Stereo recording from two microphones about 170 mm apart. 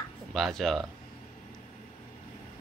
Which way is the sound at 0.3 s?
Centre (ahead or behind).